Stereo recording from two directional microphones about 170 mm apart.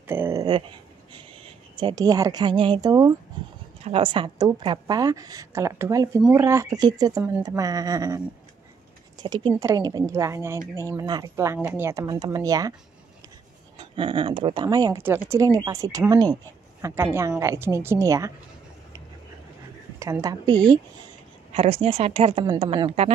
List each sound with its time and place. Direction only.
0.0 s a sound: 15° right (ahead or behind)
1.1 s speech: 25° right (ahead or behind)
3.4 s a sound: 25° right (ahead or behind)
3.9 s speech: 30° right (ahead or behind)
9.2 s speech: 25° right (ahead or behind)
13.7 s speech: 30° right (ahead or behind)
20.0 s speech: 20° right (ahead or behind)
21.5 s speech: 35° right (ahead or behind)